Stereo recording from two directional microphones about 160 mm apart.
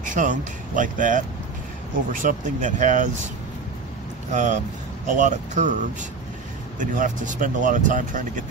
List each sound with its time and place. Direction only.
0.0 s speech: 50° right (ahead or behind)
4.3 s speech: 50° right (ahead or behind)